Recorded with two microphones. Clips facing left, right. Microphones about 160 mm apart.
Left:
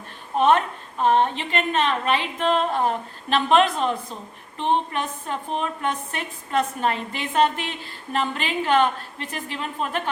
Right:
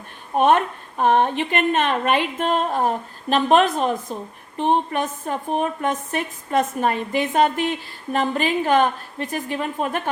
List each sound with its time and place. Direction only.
0.3 s a woman's voice: 50° right (ahead or behind)